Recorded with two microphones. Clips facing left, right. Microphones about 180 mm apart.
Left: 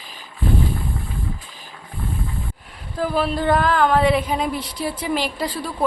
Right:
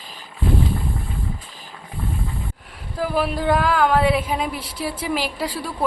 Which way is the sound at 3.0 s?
10° right (ahead or behind).